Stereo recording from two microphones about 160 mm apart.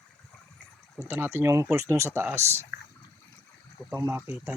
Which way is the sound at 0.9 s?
15° right (ahead or behind).